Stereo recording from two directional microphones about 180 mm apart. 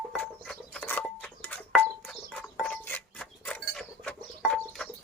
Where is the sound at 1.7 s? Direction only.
5° left (ahead or behind).